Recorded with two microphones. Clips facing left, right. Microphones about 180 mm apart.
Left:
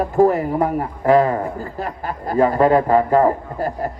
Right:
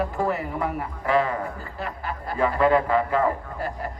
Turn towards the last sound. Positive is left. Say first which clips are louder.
# left 7 dB
turn(degrees=40)  # may be behind; listen again after turning